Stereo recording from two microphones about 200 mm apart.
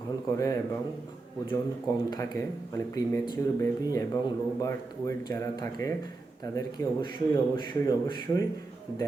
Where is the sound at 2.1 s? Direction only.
15° left (ahead or behind).